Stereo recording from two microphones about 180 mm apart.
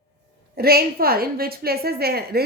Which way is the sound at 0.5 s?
60° right (ahead or behind).